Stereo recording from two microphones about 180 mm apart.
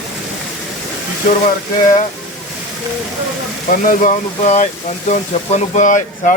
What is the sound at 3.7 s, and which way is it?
Speech, 50° left (ahead or behind).